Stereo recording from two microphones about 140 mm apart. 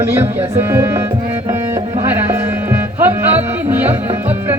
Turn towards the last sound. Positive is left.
turn(degrees=-15)  # may be behind; listen again after turning